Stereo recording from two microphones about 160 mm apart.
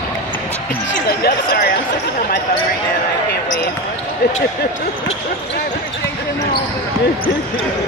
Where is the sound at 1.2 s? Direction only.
90° left.